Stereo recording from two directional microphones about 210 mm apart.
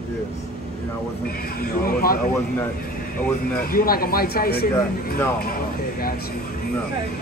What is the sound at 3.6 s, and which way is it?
Speech, 45° left (ahead or behind).